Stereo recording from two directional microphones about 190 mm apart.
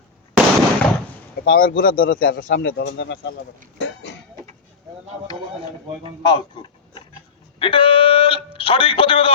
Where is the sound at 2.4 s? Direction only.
75° left (ahead or behind).